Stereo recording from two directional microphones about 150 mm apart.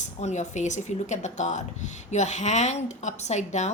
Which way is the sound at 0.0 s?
50° left (ahead or behind).